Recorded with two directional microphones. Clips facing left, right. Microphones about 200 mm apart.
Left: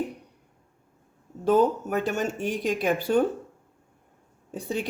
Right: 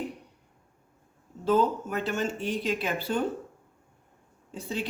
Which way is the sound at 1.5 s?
50° left (ahead or behind).